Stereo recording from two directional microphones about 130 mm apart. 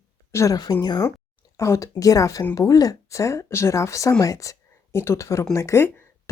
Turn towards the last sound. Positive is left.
turn(degrees=15)  # may be behind; listen again after turning